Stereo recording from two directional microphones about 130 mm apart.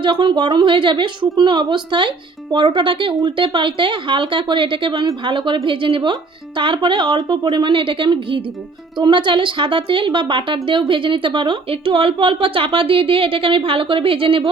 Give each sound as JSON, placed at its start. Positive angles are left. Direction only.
{"t": 0.0, "sound": "speech", "side_deg": -35}